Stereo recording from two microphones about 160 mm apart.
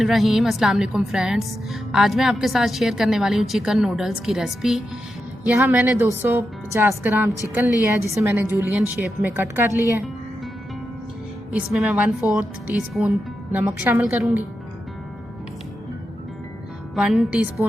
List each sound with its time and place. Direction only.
0.0 s a woman's voice: centre (ahead or behind)
11.5 s a woman's voice: 10° right (ahead or behind)
16.9 s a woman's voice: centre (ahead or behind)